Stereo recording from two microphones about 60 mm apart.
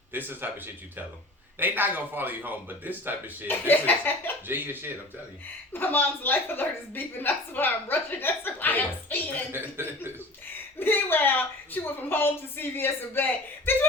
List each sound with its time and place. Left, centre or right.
0.1 s speech: right
3.4 s a woman's voice: left
4.4 s speech: right
5.7 s a woman's voice: left
9.5 s speech: right
10.8 s a woman's voice: left